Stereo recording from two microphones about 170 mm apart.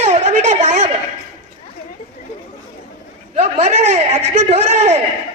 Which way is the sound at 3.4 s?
40° right (ahead or behind).